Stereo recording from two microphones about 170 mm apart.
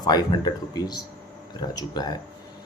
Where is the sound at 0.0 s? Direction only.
25° left (ahead or behind).